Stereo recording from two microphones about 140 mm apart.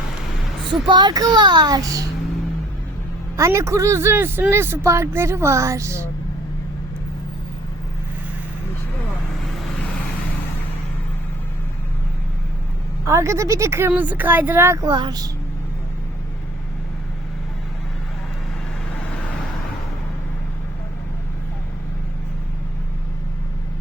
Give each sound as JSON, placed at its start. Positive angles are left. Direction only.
{"t": 0.9, "sound": "speech", "side_deg": -30}
{"t": 3.3, "sound": "speech", "side_deg": -20}
{"t": 9.4, "sound": "vehicle", "side_deg": 5}
{"t": 13.1, "sound": "speech", "side_deg": -20}
{"t": 18.9, "sound": "vehicle", "side_deg": 10}